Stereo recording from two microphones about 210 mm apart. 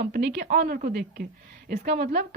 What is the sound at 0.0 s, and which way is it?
A woman's voice, 50° right (ahead or behind).